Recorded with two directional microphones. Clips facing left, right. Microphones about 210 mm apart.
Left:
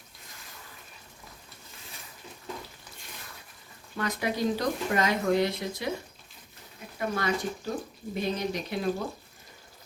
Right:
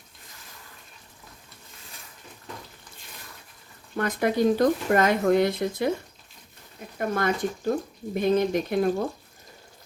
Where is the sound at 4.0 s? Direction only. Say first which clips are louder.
Right 6 dB; 50° right (ahead or behind).